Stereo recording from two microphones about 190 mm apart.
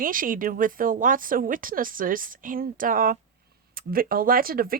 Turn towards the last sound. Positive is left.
turn(degrees=-50)  # may be behind; listen again after turning